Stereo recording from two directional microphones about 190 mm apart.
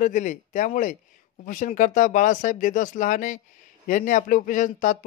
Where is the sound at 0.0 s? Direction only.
40° left (ahead or behind).